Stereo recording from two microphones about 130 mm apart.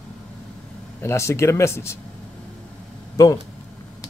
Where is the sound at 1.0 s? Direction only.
20° left (ahead or behind).